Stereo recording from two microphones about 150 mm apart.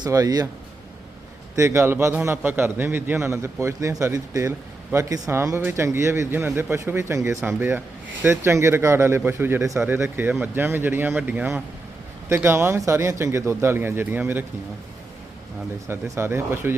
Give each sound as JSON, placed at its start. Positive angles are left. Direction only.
{"t": 0.0, "sound": "speech", "side_deg": -25}
{"t": 1.5, "sound": "a man's voice", "side_deg": -20}
{"t": 15.9, "sound": "a man's voice", "side_deg": -15}